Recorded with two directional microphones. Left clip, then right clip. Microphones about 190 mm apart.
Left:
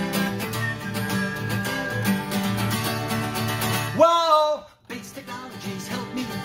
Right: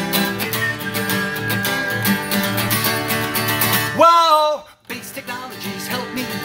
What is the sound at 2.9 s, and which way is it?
Music, 20° right (ahead or behind).